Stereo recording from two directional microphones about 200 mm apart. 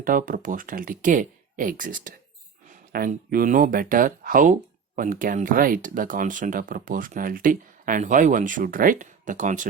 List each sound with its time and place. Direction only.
0.0 s speech: 45° right (ahead or behind)